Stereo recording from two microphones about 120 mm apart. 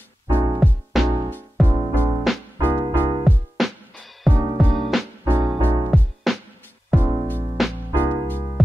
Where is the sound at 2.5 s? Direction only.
20° right (ahead or behind).